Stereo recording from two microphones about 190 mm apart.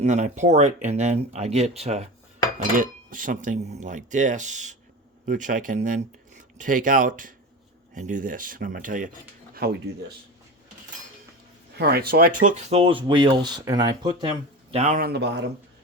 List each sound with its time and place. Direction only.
0.0 s speech: 40° right (ahead or behind)
2.7 s speech: 45° right (ahead or behind)
11.7 s speech: 55° right (ahead or behind)
12.5 s speech: 30° right (ahead or behind)
15.0 s speech: 60° right (ahead or behind)